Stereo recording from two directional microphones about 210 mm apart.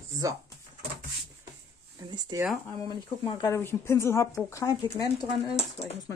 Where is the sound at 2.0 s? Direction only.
20° right (ahead or behind).